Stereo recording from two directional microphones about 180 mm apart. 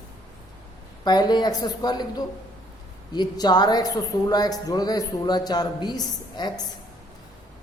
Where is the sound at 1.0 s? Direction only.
25° left (ahead or behind).